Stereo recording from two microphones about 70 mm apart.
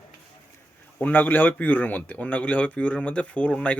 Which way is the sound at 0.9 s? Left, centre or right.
Left.